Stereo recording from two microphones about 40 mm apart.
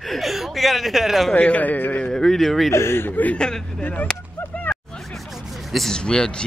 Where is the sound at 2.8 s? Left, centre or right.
Left.